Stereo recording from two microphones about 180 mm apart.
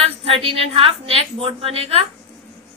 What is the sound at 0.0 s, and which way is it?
A woman's voice, 30° right (ahead or behind).